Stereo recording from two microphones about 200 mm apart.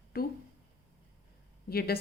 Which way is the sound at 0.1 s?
50° left (ahead or behind).